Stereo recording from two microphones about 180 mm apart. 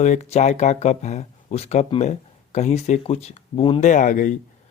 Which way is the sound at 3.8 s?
45° left (ahead or behind).